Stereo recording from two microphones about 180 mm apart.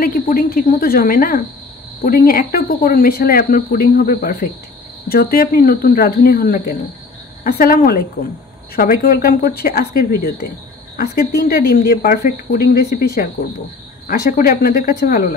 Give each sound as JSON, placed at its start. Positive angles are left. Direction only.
{"t": 0.0, "sound": "speech", "side_deg": 55}